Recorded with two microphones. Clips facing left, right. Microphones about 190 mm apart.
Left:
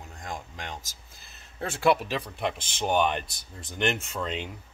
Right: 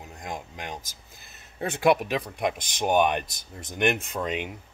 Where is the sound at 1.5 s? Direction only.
15° right (ahead or behind).